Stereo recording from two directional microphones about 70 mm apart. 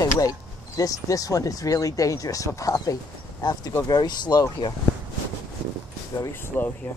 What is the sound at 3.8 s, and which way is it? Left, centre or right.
Speech, left.